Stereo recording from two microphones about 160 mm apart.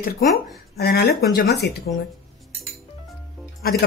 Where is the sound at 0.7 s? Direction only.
85° left.